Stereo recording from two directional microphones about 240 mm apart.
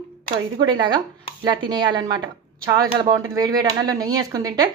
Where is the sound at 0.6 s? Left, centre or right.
Centre.